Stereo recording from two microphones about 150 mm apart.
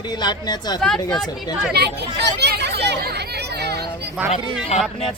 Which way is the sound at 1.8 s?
90° right.